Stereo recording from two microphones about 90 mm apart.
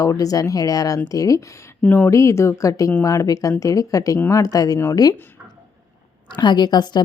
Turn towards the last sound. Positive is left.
turn(degrees=55)  # may be behind; listen again after turning